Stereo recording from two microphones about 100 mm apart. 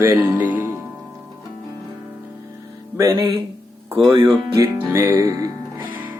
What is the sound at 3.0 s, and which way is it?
Music, 35° right (ahead or behind).